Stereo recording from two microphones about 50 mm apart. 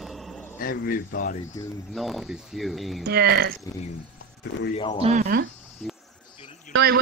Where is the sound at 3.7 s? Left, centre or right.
Left.